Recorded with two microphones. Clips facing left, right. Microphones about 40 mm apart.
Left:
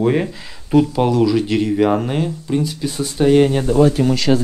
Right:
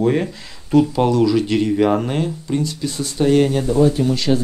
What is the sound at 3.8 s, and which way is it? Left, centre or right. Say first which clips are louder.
Speech: left 2 dB; left.